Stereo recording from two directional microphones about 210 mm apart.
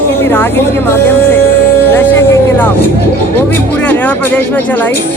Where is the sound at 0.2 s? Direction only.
10° left (ahead or behind).